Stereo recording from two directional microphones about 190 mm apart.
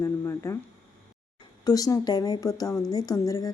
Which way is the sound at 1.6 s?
20° left (ahead or behind).